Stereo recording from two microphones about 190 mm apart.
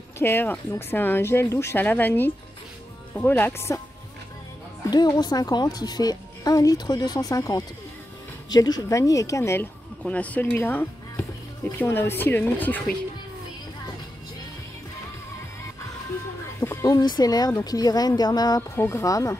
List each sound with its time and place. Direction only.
0.2 s speech: 10° left (ahead or behind)
4.9 s speech: 20° left (ahead or behind)
16.6 s speech: 20° left (ahead or behind)